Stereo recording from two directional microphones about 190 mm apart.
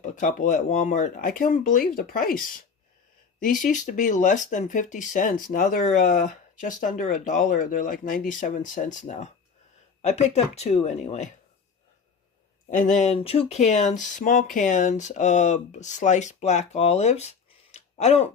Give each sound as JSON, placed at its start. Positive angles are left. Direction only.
{"t": 0.0, "sound": "speech", "side_deg": 40}
{"t": 3.4, "sound": "speech", "side_deg": 45}
{"t": 12.7, "sound": "speech", "side_deg": 40}